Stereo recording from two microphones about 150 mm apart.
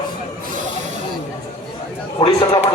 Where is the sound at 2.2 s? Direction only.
35° left (ahead or behind).